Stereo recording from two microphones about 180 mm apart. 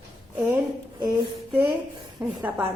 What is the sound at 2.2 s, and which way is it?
Speech, 10° right (ahead or behind).